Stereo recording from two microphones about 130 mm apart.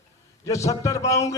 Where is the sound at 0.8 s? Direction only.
25° left (ahead or behind).